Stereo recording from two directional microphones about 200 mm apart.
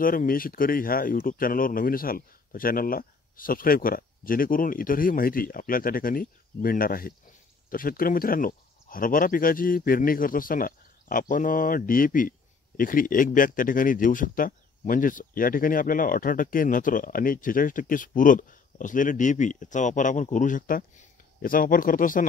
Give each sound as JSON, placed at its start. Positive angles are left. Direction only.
{"t": 0.0, "sound": "speech", "side_deg": 45}